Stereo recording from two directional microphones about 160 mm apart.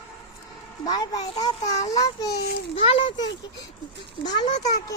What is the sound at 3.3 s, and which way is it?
Speech, 90° left.